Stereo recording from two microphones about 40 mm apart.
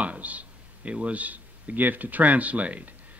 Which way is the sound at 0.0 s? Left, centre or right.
Right.